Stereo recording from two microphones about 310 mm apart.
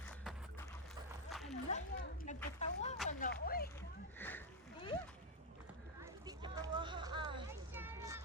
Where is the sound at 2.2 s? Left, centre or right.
Left.